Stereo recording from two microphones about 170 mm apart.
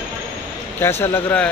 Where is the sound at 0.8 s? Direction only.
15° left (ahead or behind).